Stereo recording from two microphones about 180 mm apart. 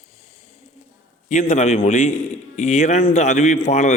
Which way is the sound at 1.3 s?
40° left (ahead or behind).